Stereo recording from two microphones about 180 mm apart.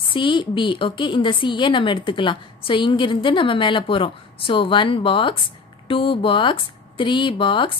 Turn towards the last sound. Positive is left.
turn(degrees=30)  # may be behind; listen again after turning